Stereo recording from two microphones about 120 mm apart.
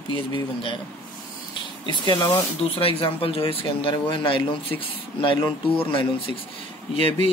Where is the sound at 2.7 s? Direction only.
50° left (ahead or behind).